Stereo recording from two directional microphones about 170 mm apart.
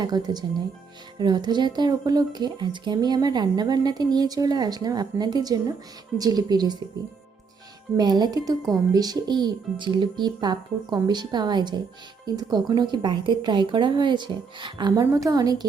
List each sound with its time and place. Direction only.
0.0 s speech: 25° right (ahead or behind)
7.9 s speech: 25° right (ahead or behind)